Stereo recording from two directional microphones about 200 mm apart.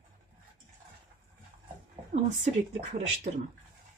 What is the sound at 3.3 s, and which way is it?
Speech, 40° right (ahead or behind).